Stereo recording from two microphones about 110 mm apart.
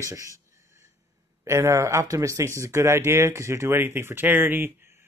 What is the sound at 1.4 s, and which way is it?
Speech, 25° right (ahead or behind).